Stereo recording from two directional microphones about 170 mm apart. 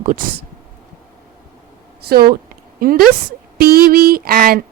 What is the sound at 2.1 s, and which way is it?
A woman's voice, 65° right (ahead or behind).